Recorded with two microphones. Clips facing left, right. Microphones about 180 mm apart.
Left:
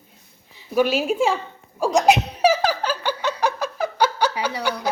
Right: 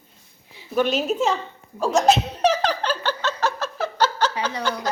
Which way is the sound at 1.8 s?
15° left (ahead or behind).